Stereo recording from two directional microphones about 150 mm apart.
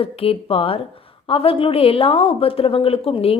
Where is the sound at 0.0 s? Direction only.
40° left (ahead or behind).